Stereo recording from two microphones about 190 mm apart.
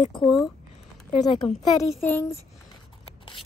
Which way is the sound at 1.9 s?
10° left (ahead or behind).